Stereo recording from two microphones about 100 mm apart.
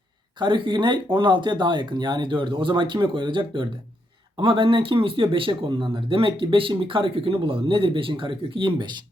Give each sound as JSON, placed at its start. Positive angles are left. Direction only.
{"t": 0.3, "sound": "speech", "side_deg": -50}